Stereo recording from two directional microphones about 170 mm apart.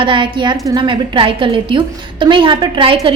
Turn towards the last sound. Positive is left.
turn(degrees=-30)  # may be behind; listen again after turning